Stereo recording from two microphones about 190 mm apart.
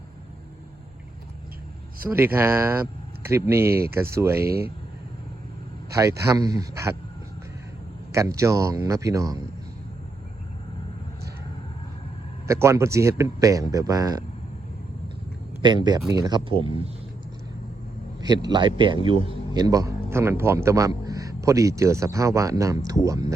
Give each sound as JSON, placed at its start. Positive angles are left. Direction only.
{"t": 2.0, "sound": "a man's voice", "side_deg": -10}
{"t": 4.4, "sound": "speech", "side_deg": -55}
{"t": 5.9, "sound": "a man's voice", "side_deg": -15}
{"t": 8.1, "sound": "a man's voice", "side_deg": -15}
{"t": 12.5, "sound": "a man's voice", "side_deg": -15}
{"t": 15.6, "sound": "speech", "side_deg": -20}
{"t": 18.2, "sound": "a man's voice", "side_deg": -20}